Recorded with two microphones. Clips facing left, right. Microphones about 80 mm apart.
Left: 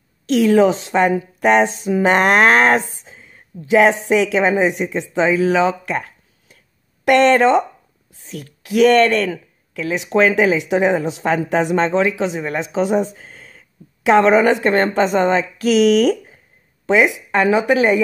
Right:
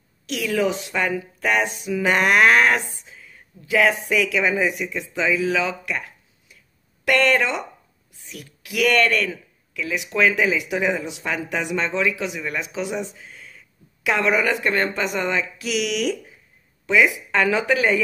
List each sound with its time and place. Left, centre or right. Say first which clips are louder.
0.3 s speech: left 9 dB; left
7.1 s speech: left 7 dB; left
7.3 s speech: left 9 dB; left
16.8 s speech: left 4 dB; left